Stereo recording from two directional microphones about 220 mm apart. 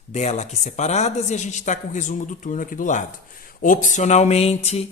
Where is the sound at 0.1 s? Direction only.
30° left (ahead or behind).